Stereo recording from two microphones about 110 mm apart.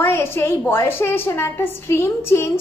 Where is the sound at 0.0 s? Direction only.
25° left (ahead or behind).